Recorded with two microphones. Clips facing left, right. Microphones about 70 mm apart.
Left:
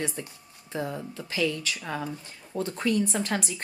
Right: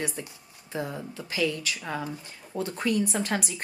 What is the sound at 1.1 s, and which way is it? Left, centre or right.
Speech, centre.